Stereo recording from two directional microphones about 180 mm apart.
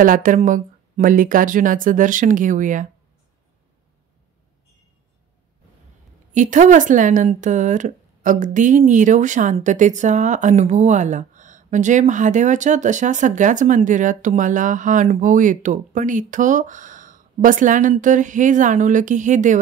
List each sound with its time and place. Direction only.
0.0 s speech: 50° right (ahead or behind)
6.3 s speech: 45° right (ahead or behind)